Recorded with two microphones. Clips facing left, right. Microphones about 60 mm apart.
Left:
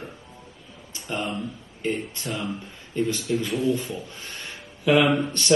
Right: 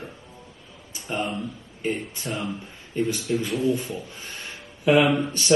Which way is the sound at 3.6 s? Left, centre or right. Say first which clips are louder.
Even; right.